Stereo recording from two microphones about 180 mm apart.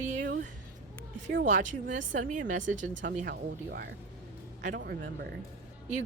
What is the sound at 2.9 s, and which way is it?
Speech, 90° right.